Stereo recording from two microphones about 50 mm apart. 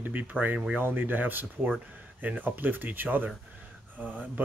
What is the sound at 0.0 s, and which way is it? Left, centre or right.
Speech, right.